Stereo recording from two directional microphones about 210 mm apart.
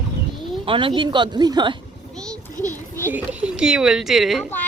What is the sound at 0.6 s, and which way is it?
Speech, 25° right (ahead or behind).